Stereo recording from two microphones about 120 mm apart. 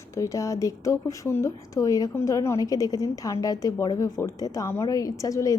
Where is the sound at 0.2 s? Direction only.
25° left (ahead or behind).